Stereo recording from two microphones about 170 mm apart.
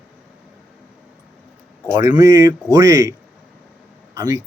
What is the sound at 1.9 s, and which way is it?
Speech, 20° right (ahead or behind).